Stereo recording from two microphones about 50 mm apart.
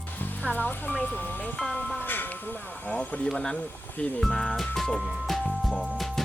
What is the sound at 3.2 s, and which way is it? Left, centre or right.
Speech, centre.